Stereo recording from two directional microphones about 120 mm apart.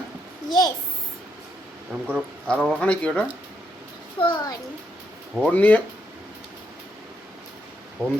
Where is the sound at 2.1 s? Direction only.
5° left (ahead or behind).